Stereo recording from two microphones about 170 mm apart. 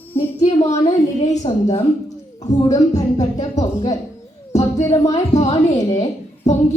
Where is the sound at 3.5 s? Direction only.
40° left (ahead or behind).